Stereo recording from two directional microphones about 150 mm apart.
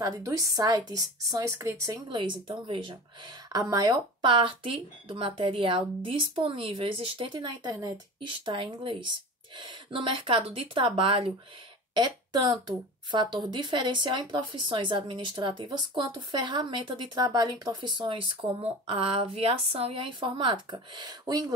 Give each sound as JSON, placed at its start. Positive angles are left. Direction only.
{"t": 0.0, "sound": "a woman's voice", "side_deg": -25}
{"t": 2.0, "sound": "speech", "side_deg": -35}